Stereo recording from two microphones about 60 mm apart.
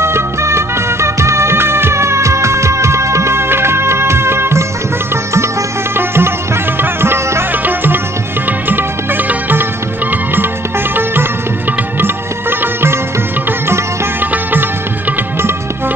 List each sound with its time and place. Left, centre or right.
0.0 s music: right
12.0 s music: right
14.2 s music: right